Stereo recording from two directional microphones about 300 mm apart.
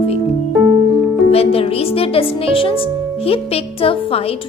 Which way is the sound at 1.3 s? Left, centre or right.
Centre.